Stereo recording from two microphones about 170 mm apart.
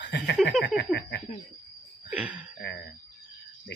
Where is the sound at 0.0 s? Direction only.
80° left.